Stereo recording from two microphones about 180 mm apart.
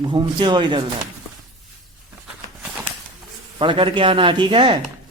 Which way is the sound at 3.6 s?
30° right (ahead or behind).